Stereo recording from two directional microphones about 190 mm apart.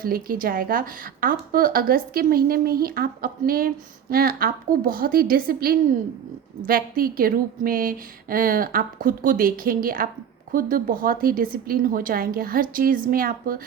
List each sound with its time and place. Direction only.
0.0 s a woman's voice: 50° right (ahead or behind)